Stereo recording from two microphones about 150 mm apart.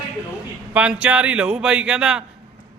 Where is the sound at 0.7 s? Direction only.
10° right (ahead or behind).